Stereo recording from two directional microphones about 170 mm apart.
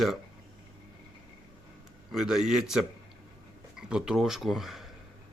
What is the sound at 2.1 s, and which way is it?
Speech, centre (ahead or behind).